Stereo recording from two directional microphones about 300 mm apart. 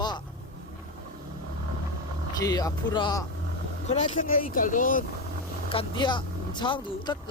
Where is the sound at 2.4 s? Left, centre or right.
Centre.